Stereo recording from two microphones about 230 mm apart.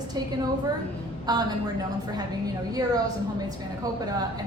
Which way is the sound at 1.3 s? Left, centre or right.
Centre.